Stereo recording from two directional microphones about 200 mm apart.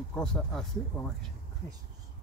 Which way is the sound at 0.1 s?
5° left (ahead or behind).